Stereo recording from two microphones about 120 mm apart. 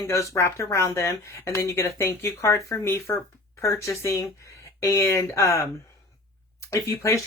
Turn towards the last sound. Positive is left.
turn(degrees=25)  # may be behind; listen again after turning